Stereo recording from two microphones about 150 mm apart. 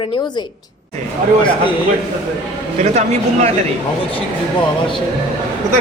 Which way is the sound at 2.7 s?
45° right (ahead or behind).